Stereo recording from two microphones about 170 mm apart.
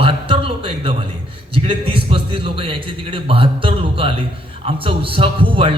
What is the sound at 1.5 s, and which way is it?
Speech, 30° right (ahead or behind).